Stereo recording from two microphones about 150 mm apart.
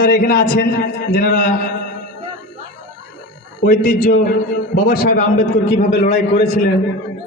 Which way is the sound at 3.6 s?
65° left (ahead or behind).